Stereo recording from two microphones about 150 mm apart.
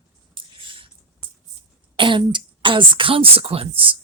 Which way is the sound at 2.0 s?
35° right (ahead or behind).